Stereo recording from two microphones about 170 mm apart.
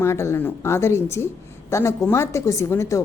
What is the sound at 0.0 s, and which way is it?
A woman's voice, 15° left (ahead or behind).